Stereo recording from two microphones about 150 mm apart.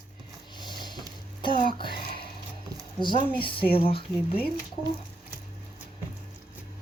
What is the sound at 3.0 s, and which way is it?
A woman's voice, 30° left (ahead or behind).